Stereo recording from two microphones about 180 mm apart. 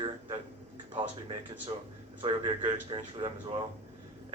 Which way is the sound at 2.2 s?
25° right (ahead or behind).